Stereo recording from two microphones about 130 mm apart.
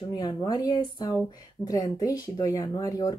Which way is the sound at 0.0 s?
35° left (ahead or behind).